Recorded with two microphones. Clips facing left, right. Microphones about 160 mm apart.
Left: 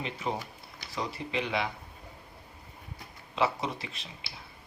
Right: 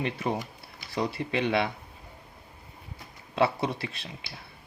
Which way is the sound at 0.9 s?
65° right (ahead or behind).